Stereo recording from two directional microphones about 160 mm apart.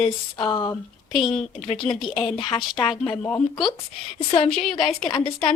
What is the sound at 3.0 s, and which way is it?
Speech, 10° left (ahead or behind).